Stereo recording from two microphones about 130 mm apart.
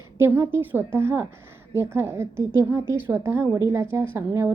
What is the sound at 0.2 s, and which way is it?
A woman's voice, 20° right (ahead or behind).